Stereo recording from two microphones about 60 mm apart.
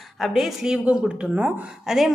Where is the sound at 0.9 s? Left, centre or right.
Centre.